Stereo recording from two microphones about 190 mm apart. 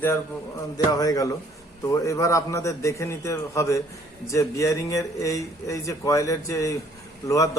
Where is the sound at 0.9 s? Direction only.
20° left (ahead or behind).